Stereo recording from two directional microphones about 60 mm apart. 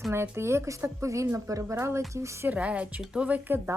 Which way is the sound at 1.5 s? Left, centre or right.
Right.